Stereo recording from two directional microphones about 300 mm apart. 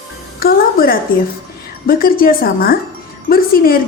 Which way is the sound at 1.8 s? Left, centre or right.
Left.